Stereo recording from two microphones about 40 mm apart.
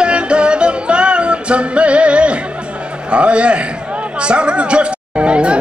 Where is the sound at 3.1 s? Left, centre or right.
Right.